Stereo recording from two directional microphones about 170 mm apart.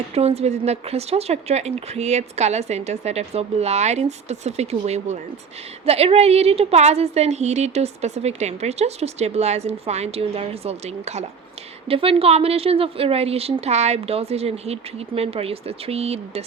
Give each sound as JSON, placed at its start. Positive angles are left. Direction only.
{"t": 0.1, "sound": "a woman's voice", "side_deg": -35}